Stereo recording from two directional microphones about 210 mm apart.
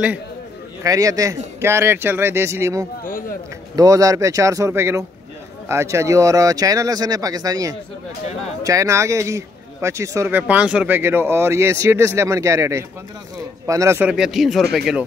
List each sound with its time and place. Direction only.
0.8 s speech: 15° right (ahead or behind)
3.0 s speech: 40° left (ahead or behind)
3.7 s speech: 15° right (ahead or behind); by 15.0 s centre (ahead or behind)